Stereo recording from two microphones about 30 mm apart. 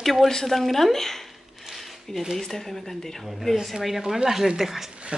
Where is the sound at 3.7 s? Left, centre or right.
Centre.